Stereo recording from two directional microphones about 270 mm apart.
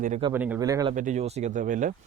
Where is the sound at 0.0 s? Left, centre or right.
Right.